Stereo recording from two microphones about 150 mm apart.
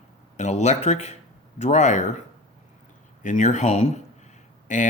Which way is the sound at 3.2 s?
55° left (ahead or behind).